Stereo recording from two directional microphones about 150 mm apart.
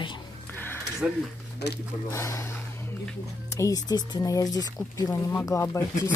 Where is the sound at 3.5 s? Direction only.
25° left (ahead or behind).